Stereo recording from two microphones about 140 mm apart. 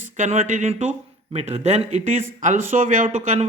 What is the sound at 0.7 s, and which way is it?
Speech, 50° right (ahead or behind).